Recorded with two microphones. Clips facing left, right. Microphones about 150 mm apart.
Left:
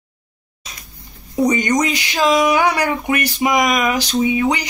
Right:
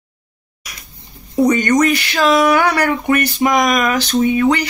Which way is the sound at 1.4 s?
15° left (ahead or behind).